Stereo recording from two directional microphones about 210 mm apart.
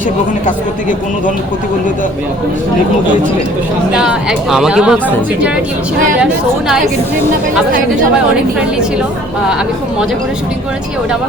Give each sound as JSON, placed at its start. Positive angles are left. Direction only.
{"t": 3.9, "sound": "speech", "side_deg": -5}
{"t": 6.1, "sound": "speech", "side_deg": -5}